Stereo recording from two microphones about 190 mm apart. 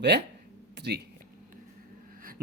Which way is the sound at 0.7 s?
60° right (ahead or behind).